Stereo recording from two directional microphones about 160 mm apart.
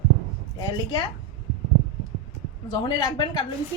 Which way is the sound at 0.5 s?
25° left (ahead or behind).